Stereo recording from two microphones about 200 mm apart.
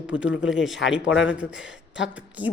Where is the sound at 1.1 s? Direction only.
70° left (ahead or behind).